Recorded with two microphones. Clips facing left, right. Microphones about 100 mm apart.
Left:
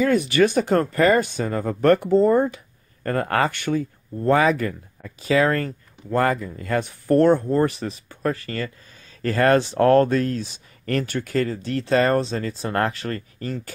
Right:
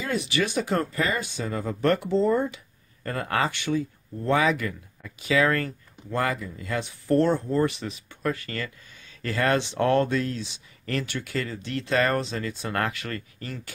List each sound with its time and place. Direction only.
0.0 s speech: 50° left (ahead or behind)
6.0 s speech: 45° left (ahead or behind)